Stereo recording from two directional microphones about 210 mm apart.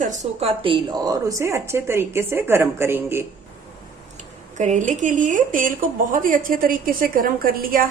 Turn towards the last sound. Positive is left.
turn(degrees=-40)  # may be behind; listen again after turning